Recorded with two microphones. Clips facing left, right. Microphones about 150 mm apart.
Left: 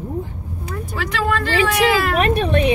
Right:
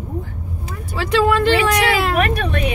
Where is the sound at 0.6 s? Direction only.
30° right (ahead or behind).